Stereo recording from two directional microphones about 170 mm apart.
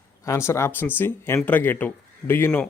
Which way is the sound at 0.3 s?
15° left (ahead or behind).